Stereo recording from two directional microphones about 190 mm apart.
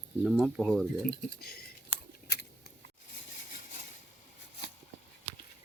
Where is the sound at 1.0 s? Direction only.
55° left (ahead or behind).